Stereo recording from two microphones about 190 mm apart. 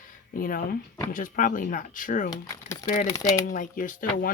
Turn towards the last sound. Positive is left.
turn(degrees=45)  # may be behind; listen again after turning